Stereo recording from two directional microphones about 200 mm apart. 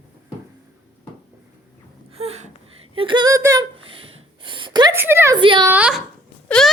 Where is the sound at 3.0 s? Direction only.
25° right (ahead or behind).